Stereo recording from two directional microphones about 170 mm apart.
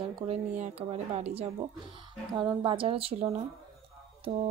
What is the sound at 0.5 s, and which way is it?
Speech, 45° right (ahead or behind).